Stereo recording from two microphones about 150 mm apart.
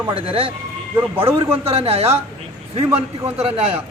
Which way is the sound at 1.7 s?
40° right (ahead or behind).